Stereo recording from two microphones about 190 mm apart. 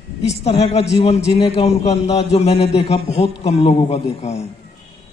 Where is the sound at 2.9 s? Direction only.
35° left (ahead or behind).